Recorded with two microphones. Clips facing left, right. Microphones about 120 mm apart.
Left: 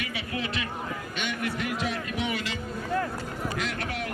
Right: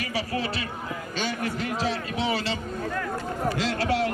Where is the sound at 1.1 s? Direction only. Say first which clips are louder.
Right 3 dB; 35° right (ahead or behind).